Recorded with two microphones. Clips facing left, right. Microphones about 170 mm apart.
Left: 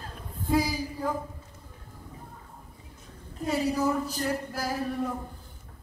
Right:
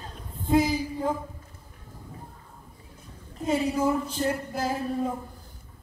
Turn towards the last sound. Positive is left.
turn(degrees=-25)  # may be behind; listen again after turning